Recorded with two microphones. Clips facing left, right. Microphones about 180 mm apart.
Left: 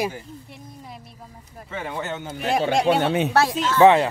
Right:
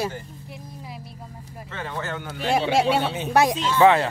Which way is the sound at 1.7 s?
10° left (ahead or behind).